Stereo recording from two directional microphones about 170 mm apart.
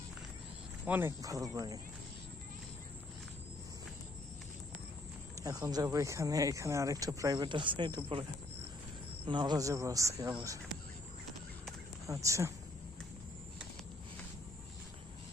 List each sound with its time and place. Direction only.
0.9 s speech: 15° right (ahead or behind)
5.4 s speech: 20° right (ahead or behind)
9.2 s speech: 25° right (ahead or behind)
12.0 s speech: 20° right (ahead or behind)